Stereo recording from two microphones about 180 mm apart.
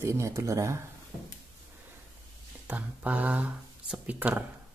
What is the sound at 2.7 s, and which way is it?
Speech, 10° right (ahead or behind).